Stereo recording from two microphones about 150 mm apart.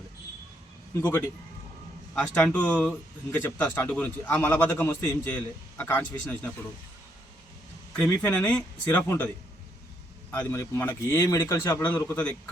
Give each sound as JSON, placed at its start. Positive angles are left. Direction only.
{"t": 0.9, "sound": "speech", "side_deg": 15}
{"t": 7.9, "sound": "speech", "side_deg": 10}
{"t": 10.3, "sound": "speech", "side_deg": 15}